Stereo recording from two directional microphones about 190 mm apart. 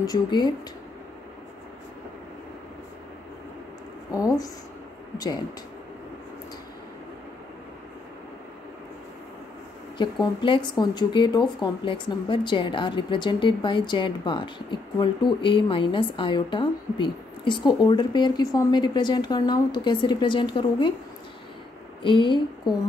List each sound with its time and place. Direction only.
0.0 s speech: 20° left (ahead or behind)
5.1 s speech: 20° left (ahead or behind)
9.9 s speech: 25° left (ahead or behind)
22.0 s speech: 25° left (ahead or behind)